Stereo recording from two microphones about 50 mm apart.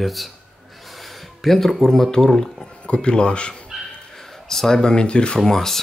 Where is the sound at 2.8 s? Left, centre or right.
Centre.